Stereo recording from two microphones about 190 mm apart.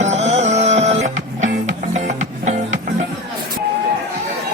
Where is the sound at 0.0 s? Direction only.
35° right (ahead or behind).